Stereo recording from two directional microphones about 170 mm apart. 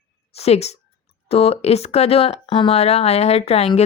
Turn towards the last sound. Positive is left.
turn(degrees=35)  # may be behind; listen again after turning